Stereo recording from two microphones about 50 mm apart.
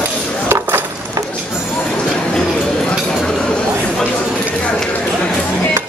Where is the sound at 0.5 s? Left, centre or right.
Right.